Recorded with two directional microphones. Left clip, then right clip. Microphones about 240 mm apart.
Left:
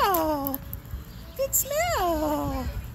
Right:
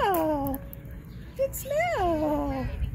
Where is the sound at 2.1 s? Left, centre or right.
Centre.